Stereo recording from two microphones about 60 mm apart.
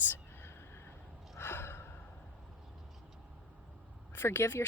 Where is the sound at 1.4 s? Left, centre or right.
Left.